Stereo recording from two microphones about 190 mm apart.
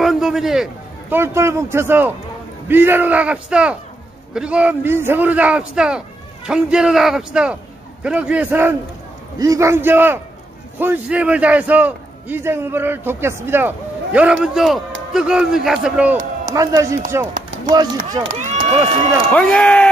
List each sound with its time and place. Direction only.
0.0 s a sound: centre (ahead or behind)
1.1 s a man's voice: 15° right (ahead or behind)
16.5 s a man's voice: 15° right (ahead or behind)
18.3 s speech: 40° right (ahead or behind)
19.3 s a man's voice: 5° left (ahead or behind)